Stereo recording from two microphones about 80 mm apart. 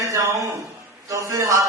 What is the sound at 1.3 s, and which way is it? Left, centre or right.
Speech, right.